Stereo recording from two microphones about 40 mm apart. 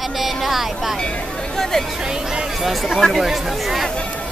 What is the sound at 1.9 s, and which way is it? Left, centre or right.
Speech, centre.